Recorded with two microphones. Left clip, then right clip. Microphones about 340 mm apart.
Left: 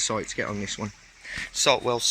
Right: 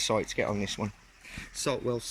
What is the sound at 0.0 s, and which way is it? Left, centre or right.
Speech, centre.